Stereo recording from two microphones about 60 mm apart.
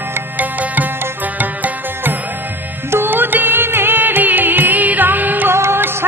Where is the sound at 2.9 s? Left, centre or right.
Right.